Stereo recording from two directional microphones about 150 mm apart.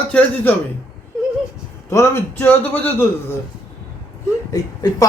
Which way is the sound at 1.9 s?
20° left (ahead or behind).